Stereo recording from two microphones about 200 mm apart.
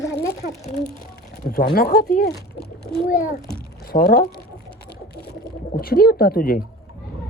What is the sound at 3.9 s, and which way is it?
Speech, 50° left (ahead or behind).